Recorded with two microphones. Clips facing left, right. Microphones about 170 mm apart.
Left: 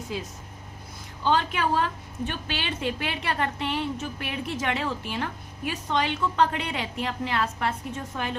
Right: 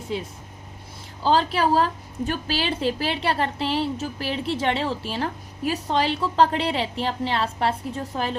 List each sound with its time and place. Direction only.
1.2 s a woman's voice: 35° right (ahead or behind)